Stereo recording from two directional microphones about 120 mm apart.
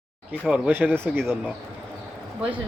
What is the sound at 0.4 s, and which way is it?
Speech, 5° right (ahead or behind).